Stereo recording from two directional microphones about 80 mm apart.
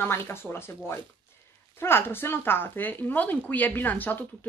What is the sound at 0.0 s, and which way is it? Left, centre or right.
Speech, left.